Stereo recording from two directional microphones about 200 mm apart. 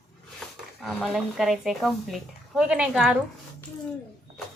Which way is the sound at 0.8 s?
Centre (ahead or behind).